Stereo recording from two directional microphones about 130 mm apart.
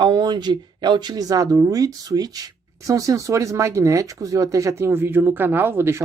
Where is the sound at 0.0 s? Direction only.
35° right (ahead or behind).